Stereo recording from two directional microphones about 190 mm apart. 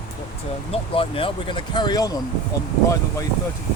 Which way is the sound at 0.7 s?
30° left (ahead or behind).